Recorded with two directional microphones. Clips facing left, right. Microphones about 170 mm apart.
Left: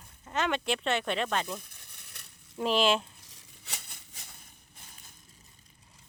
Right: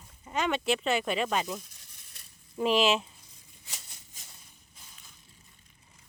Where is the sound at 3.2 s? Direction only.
80° left; by 4.3 s 65° left (ahead or behind).